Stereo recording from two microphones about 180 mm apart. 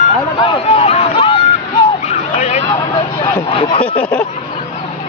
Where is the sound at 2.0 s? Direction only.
40° left (ahead or behind).